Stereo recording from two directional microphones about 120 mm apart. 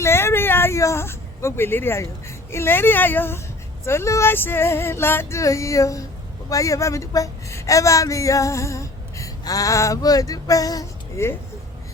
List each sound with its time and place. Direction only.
0.0 s speech: 20° left (ahead or behind)